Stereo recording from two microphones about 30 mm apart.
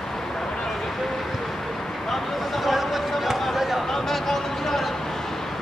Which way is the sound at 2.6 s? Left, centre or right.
Centre.